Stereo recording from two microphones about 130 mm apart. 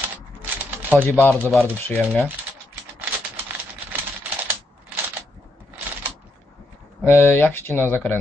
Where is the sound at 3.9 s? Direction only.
15° right (ahead or behind).